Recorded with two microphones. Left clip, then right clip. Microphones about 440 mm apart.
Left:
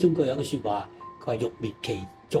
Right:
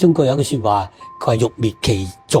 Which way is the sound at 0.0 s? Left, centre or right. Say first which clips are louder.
Right 9 dB; right.